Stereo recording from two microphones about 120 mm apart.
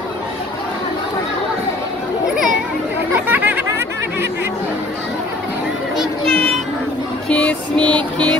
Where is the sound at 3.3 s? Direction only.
15° right (ahead or behind).